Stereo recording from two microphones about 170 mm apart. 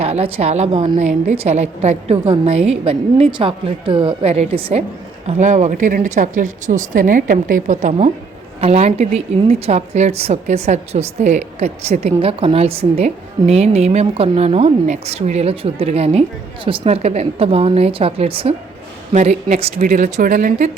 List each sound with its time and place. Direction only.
0.0 s a woman's voice: 35° right (ahead or behind); by 20.7 s 55° right (ahead or behind)